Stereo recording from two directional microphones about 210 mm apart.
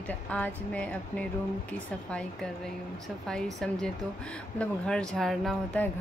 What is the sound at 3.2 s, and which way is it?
Speech, 5° left (ahead or behind).